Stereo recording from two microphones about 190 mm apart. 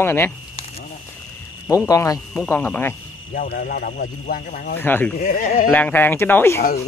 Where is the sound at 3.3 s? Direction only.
50° left (ahead or behind).